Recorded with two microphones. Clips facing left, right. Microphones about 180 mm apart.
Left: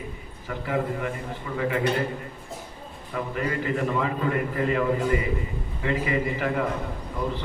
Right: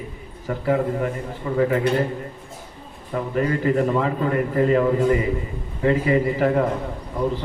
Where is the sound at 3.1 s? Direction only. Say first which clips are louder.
Right 6 dB; 40° right (ahead or behind).